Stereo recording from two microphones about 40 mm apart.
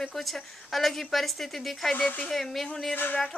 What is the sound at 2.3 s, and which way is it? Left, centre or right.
Speech, centre.